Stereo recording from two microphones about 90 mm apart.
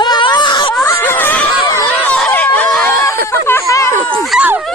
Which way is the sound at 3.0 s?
30° left (ahead or behind).